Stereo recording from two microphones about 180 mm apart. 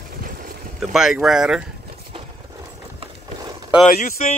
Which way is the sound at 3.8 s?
45° left (ahead or behind).